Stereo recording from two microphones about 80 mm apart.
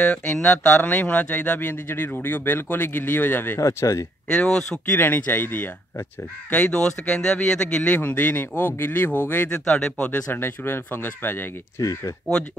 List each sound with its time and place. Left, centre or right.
0.2 s speech: centre
3.5 s speech: left
4.3 s speech: centre
4.9 s speech: left
6.5 s speech: centre
7.9 s speech: left
9.5 s speech: centre; by 11.4 s left
11.8 s speech: left